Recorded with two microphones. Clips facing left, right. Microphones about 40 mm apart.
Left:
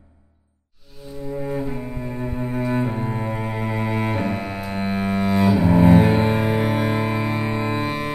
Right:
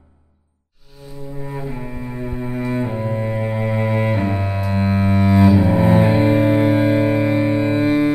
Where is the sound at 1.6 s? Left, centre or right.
Centre.